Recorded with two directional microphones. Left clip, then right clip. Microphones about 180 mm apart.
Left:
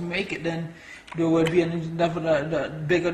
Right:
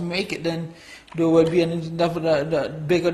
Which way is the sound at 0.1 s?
30° right (ahead or behind).